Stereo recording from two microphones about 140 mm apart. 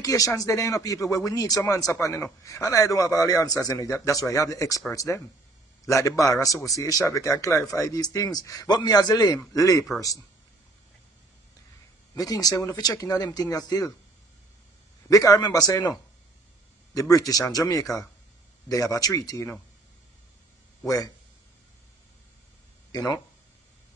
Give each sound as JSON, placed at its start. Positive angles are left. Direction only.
{"t": 0.0, "sound": "speech", "side_deg": 25}
{"t": 12.2, "sound": "speech", "side_deg": 25}
{"t": 15.0, "sound": "speech", "side_deg": 25}
{"t": 20.8, "sound": "speech", "side_deg": 25}
{"t": 22.8, "sound": "speech", "side_deg": 25}